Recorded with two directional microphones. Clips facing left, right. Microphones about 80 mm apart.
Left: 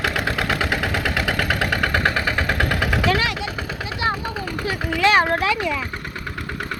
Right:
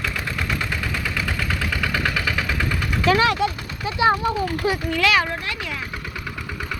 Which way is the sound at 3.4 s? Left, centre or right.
Right.